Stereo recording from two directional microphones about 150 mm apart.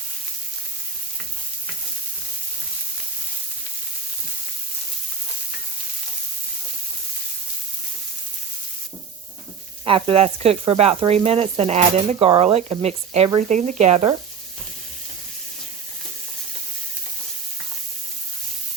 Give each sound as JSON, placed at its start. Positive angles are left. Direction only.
{"t": 9.8, "sound": "sizzle", "side_deg": -35}
{"t": 12.8, "sound": "speech", "side_deg": -45}